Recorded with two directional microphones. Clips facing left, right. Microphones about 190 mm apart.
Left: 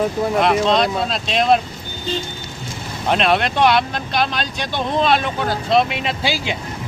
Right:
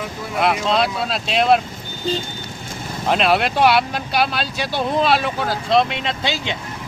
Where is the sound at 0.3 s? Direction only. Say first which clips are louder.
Left 1 dB; 5° right (ahead or behind).